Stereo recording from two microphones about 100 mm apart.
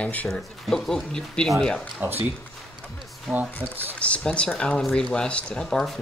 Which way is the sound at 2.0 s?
20° right (ahead or behind).